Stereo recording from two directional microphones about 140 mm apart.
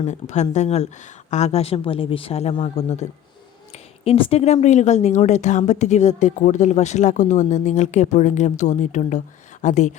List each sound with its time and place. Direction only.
0.0 s speech: 55° left (ahead or behind)